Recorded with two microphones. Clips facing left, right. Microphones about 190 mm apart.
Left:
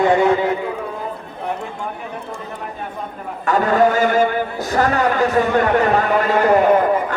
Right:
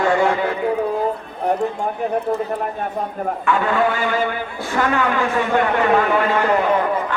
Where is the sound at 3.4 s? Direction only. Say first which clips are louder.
Left 4 dB; 40° left (ahead or behind).